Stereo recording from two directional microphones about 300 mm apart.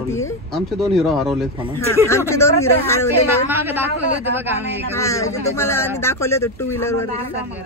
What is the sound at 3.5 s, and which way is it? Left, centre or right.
A man's voice, centre.